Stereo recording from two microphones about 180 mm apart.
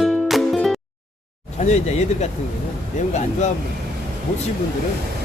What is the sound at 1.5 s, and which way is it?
Speech, 40° left (ahead or behind).